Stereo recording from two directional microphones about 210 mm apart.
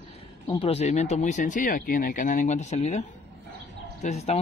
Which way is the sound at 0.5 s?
25° left (ahead or behind).